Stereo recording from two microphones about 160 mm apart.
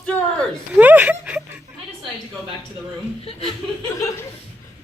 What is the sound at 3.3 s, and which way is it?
Speech, 35° left (ahead or behind).